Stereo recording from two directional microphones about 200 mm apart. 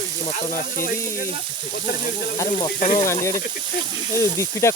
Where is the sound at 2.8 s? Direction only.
35° left (ahead or behind).